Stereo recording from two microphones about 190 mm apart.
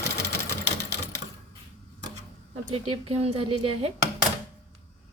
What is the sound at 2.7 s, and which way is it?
A woman's voice, 30° right (ahead or behind).